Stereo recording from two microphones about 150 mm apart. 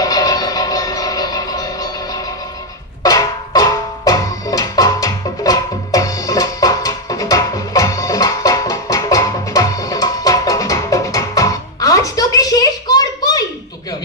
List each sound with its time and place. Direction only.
0.0 s train: 25° left (ahead or behind)
3.0 s music: 25° left (ahead or behind)